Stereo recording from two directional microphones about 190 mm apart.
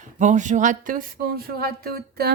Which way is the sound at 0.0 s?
40° right (ahead or behind).